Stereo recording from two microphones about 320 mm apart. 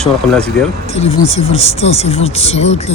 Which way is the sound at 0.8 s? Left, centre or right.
Centre.